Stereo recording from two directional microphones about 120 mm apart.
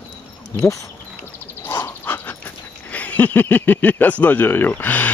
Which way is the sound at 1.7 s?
15° left (ahead or behind).